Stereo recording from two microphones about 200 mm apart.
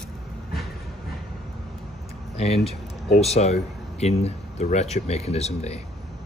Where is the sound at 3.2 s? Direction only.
30° left (ahead or behind).